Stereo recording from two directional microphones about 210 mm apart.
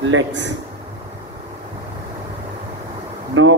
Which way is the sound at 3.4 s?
70° right (ahead or behind).